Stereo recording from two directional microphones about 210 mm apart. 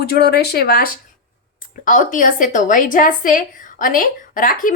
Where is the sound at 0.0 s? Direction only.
50° left (ahead or behind).